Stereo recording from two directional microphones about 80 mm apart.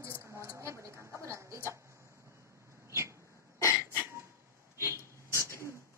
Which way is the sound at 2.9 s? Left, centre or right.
Right.